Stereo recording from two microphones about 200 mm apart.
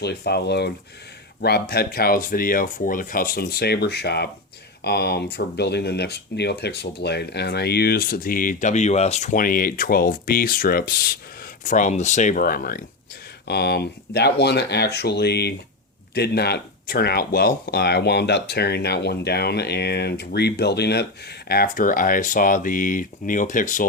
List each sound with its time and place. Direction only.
0.0 s speech: 55° left (ahead or behind)
11.6 s speech: 40° left (ahead or behind)